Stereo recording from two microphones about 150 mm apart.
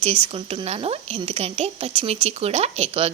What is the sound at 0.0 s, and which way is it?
A woman's voice, 40° right (ahead or behind).